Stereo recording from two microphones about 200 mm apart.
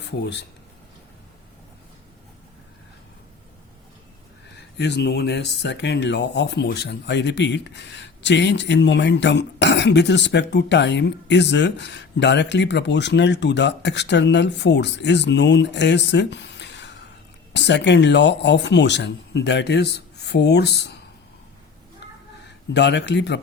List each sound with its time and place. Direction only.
0.0 s speech: 55° left (ahead or behind)
4.5 s speech: 60° left (ahead or behind)
22.0 s a sound: 60° left (ahead or behind)
22.7 s speech: 60° left (ahead or behind)